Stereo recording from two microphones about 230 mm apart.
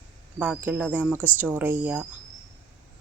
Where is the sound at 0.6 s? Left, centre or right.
Centre.